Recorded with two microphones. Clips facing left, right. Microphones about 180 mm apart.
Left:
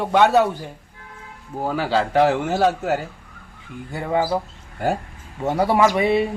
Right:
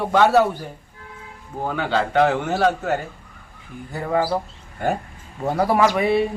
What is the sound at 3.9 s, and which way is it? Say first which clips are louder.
Speech: even; centre (ahead or behind).